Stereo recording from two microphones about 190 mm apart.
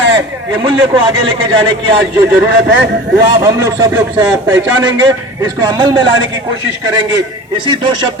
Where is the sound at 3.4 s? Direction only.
15° right (ahead or behind).